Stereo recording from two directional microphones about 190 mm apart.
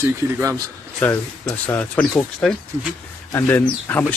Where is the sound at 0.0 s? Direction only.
15° right (ahead or behind).